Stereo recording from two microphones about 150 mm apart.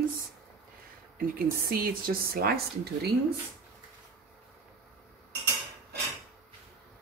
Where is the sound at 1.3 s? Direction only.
85° right.